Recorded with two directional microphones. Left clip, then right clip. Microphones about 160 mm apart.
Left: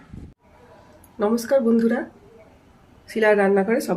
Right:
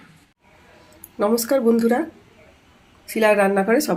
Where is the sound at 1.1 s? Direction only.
45° right (ahead or behind).